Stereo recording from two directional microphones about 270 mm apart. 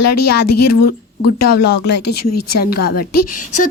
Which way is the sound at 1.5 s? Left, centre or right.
Left.